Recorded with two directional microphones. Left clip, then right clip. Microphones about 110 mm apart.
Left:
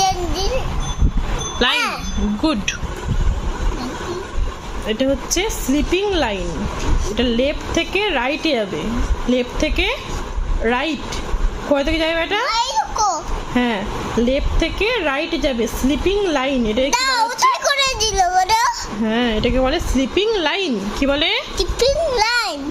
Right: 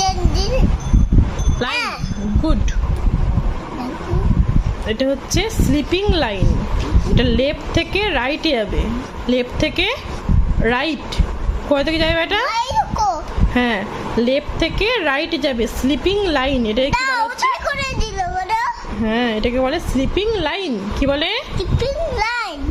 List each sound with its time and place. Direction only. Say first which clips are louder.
1.5 s wind chime: left 3 dB; 15° left (ahead or behind)
2.4 s speech: left 4 dB; 20° left (ahead or behind)
4.9 s a child's voice: even; 5° left (ahead or behind)
16.9 s child singing: left 1 dB; 35° left (ahead or behind)
19.0 s a child's voice: even; centre (ahead or behind)
21.6 s a sound: left 8 dB; 35° left (ahead or behind)